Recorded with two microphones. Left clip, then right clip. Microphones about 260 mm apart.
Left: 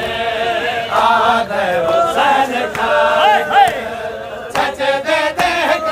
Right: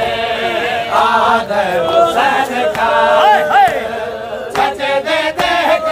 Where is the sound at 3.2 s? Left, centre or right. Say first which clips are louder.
Right 2 dB; centre.